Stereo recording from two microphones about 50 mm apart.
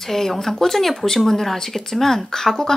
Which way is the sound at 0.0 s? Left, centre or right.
Centre.